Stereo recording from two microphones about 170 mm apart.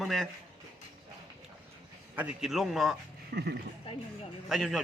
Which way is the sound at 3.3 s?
75° right (ahead or behind).